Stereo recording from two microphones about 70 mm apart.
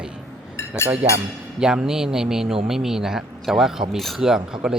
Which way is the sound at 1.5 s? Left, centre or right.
Centre.